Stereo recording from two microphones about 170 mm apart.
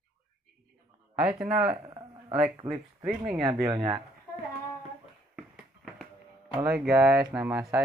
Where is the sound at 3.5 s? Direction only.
15° right (ahead or behind).